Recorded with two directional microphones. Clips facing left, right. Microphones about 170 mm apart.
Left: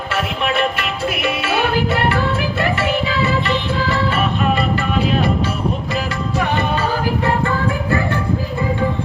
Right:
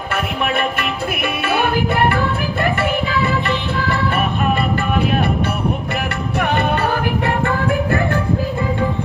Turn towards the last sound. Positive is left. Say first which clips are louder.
# even
turn(degrees=-60)  # may be behind; listen again after turning